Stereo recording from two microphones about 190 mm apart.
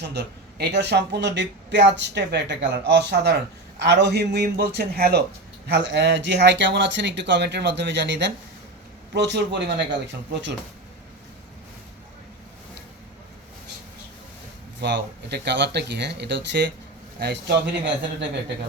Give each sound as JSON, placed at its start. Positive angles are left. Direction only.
{"t": 0.0, "sound": "a man's voice", "side_deg": -60}
{"t": 14.8, "sound": "a man's voice", "side_deg": -65}